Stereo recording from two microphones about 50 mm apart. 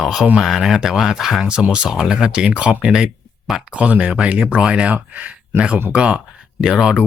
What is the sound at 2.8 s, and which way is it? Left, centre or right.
Speech, centre.